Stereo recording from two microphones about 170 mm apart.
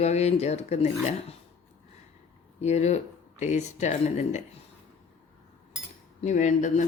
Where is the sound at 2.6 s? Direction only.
40° left (ahead or behind).